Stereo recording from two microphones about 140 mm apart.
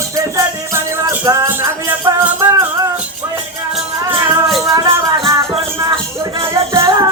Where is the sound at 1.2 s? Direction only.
25° right (ahead or behind).